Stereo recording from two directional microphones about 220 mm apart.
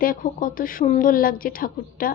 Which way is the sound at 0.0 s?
40° left (ahead or behind).